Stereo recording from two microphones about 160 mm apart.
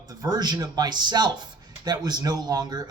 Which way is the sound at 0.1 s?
25° right (ahead or behind).